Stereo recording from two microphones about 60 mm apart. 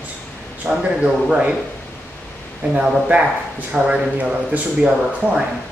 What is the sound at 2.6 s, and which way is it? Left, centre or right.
Speech, right.